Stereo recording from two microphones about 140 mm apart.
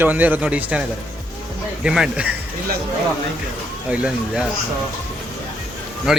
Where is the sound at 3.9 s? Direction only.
10° right (ahead or behind).